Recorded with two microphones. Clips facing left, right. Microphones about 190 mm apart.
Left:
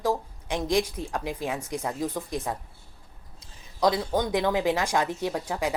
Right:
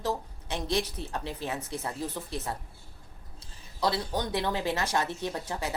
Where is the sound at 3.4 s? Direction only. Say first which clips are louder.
Left 6 dB; 15° left (ahead or behind).